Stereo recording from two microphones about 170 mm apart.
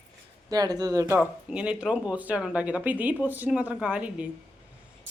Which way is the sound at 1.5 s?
5° right (ahead or behind).